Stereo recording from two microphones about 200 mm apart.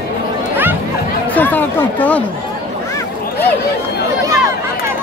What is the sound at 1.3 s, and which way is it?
Speech, 10° left (ahead or behind).